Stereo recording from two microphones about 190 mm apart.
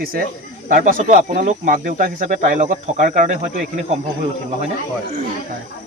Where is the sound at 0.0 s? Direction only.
50° right (ahead or behind).